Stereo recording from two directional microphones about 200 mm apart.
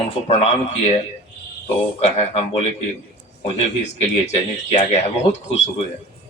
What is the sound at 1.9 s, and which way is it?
Speech, 30° left (ahead or behind).